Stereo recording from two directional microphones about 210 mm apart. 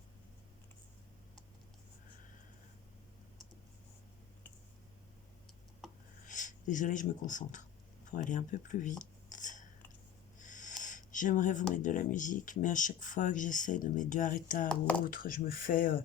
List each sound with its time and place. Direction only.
6.2 s speech: 35° left (ahead or behind)
14.7 s speech: 5° left (ahead or behind)
15.0 s speech: 40° left (ahead or behind)